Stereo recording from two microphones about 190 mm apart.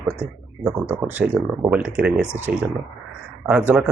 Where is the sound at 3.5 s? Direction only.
5° right (ahead or behind).